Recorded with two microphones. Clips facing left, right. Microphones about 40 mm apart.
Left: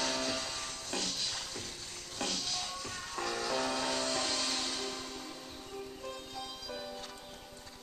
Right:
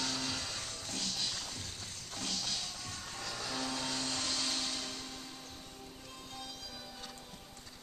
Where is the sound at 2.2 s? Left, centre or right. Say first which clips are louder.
Left 4 dB; left.